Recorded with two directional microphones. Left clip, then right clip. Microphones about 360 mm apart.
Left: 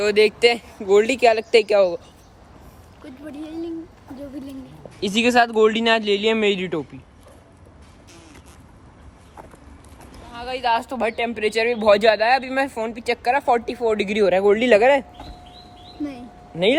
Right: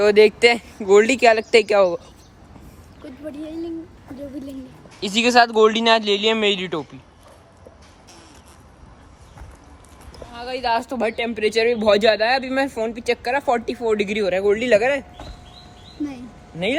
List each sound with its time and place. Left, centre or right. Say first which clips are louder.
0.0 s speech: right 3 dB; centre
3.2 s speech: right 1 dB; centre
4.9 s speech: right 2 dB; centre
10.3 s speech: left 1 dB; centre; by 15.0 s left